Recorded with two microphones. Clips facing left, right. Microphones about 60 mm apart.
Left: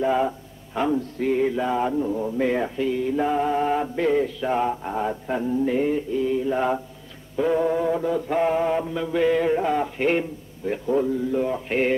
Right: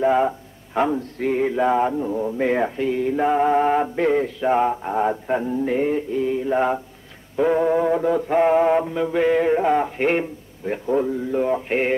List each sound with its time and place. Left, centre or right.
0.0 s mantra: right
1.1 s a sound: right
1.9 s speech: centre
2.3 s mantra: right